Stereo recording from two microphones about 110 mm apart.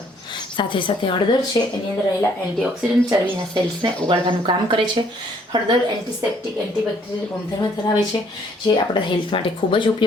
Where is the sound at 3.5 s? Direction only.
45° right (ahead or behind).